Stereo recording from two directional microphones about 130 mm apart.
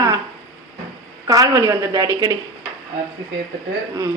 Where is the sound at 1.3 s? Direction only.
30° right (ahead or behind).